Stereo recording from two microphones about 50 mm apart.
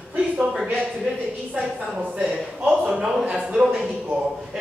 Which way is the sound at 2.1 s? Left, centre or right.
Right.